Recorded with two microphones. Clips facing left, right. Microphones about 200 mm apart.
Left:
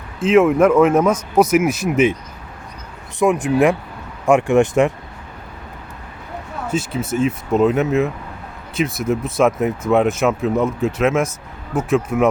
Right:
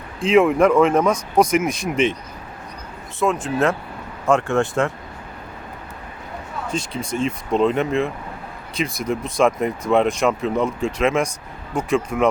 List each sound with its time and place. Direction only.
0.2 s speech: centre (ahead or behind)
3.2 s speech: 15° left (ahead or behind)
6.7 s speech: 5° left (ahead or behind)